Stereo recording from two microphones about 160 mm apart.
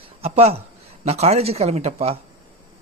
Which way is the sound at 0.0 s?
40° right (ahead or behind).